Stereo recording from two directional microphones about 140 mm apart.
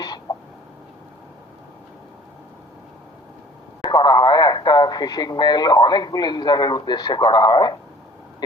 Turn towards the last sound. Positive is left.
turn(degrees=30)  # may be behind; listen again after turning